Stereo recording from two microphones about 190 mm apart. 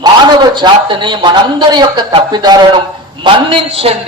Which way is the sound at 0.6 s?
25° right (ahead or behind).